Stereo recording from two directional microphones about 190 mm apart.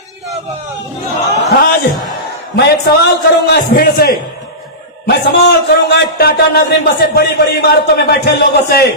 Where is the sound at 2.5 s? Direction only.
60° left (ahead or behind).